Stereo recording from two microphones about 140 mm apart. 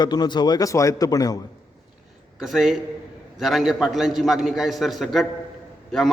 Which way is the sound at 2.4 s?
Centre (ahead or behind).